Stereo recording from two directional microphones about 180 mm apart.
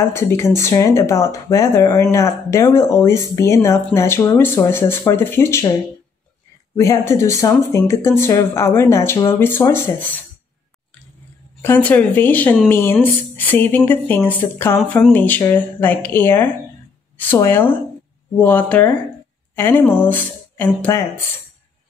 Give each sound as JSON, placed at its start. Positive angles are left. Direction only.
{"t": 0.0, "sound": "speech", "side_deg": 15}
{"t": 6.8, "sound": "speech", "side_deg": 15}
{"t": 11.6, "sound": "speech", "side_deg": 10}